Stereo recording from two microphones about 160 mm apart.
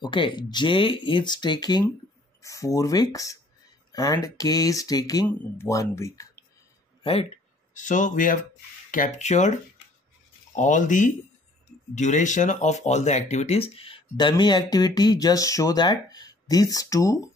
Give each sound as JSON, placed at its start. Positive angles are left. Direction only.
{"t": 0.0, "sound": "speech", "side_deg": 30}
{"t": 7.0, "sound": "speech", "side_deg": 35}
{"t": 10.5, "sound": "speech", "side_deg": 50}